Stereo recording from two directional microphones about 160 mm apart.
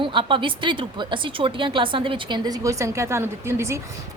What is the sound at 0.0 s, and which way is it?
A woman's voice, 30° right (ahead or behind).